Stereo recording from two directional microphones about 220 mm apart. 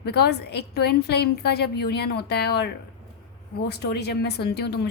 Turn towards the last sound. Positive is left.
turn(degrees=50)  # may be behind; listen again after turning